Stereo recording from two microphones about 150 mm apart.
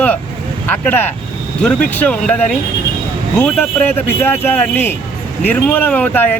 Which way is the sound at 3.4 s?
10° left (ahead or behind).